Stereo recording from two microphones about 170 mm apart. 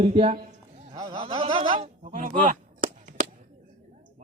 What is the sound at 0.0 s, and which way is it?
Speech, 35° right (ahead or behind).